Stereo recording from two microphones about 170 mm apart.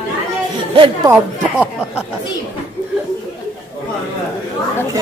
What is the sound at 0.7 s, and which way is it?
Speech, 30° right (ahead or behind).